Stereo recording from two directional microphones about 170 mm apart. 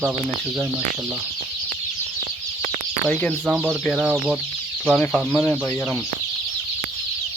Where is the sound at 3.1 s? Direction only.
10° left (ahead or behind).